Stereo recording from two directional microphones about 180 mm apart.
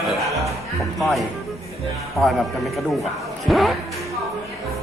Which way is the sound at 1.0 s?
Centre (ahead or behind).